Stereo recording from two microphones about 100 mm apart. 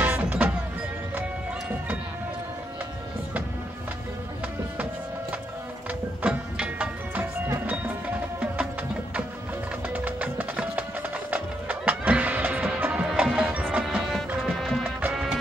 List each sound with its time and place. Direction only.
0.0 s music: 20° right (ahead or behind)
5.9 s music: 15° right (ahead or behind)
7.4 s music: 25° right (ahead or behind)
9.9 s music: 15° right (ahead or behind)
14.1 s music: centre (ahead or behind)